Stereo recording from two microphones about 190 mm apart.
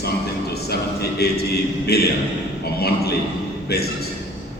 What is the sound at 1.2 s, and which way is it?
A man's voice, 55° left (ahead or behind).